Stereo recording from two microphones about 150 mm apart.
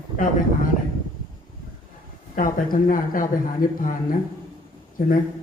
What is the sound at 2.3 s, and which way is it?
Speech, 70° left (ahead or behind).